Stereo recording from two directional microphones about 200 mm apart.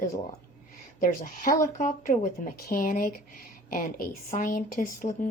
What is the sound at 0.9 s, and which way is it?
Speech, 45° left (ahead or behind).